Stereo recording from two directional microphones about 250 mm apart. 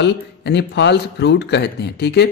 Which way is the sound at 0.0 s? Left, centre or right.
Left.